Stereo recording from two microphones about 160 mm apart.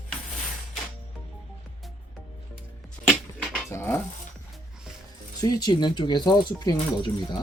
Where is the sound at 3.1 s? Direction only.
5° right (ahead or behind).